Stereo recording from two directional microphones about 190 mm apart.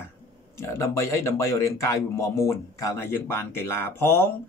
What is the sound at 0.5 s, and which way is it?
Speech, 15° left (ahead or behind).